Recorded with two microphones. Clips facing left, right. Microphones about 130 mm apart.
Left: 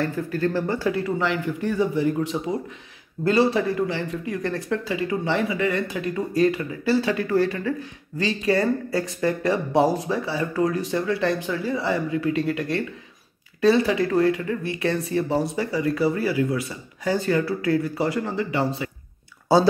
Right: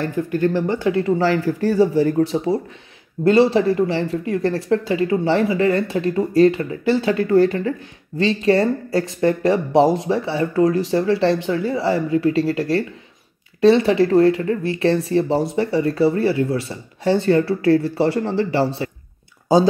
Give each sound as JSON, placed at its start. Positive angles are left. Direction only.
{"t": 0.0, "sound": "speech", "side_deg": -20}
{"t": 1.1, "sound": "speech", "side_deg": -35}